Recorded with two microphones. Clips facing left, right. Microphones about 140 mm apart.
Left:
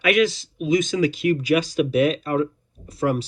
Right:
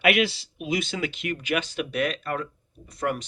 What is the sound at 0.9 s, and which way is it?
Speech, 40° left (ahead or behind).